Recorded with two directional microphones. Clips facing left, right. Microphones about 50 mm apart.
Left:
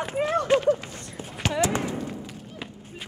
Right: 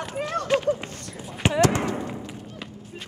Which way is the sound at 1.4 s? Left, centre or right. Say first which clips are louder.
Right 4 dB; right.